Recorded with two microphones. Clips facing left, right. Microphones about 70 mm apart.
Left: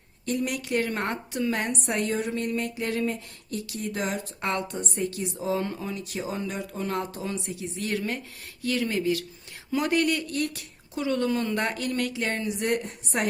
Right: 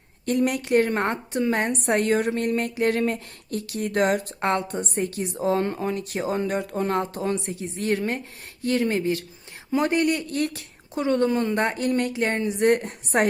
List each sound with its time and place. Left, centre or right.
0.3 s a woman's voice: right
4.4 s a woman's voice: right